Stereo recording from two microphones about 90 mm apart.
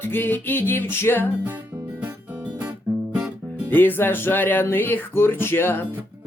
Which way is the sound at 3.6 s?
20° left (ahead or behind).